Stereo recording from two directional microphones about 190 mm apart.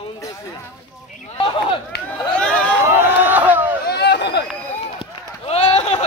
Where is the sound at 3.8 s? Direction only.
60° left (ahead or behind).